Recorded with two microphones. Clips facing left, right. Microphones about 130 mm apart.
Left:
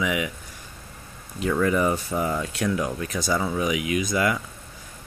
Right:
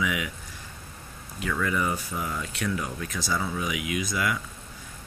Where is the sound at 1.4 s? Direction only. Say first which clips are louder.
Left 6 dB; 30° left (ahead or behind).